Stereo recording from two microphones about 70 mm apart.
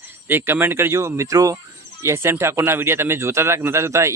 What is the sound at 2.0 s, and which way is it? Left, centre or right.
A man's voice, right.